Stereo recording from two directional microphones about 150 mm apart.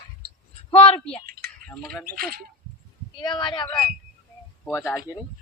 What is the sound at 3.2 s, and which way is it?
Female singing, 30° left (ahead or behind).